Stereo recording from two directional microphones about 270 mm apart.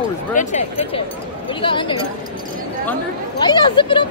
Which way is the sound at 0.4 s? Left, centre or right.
Left.